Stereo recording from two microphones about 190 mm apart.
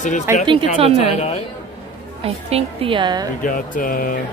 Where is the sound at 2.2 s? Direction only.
30° right (ahead or behind).